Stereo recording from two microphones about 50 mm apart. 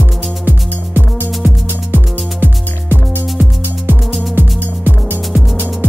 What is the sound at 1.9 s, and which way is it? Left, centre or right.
Music, right.